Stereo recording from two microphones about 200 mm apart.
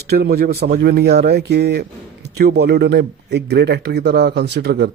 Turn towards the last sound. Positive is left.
turn(degrees=-55)  # may be behind; listen again after turning